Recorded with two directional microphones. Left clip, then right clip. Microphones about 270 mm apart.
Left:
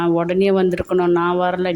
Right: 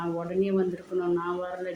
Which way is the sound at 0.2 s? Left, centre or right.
Left.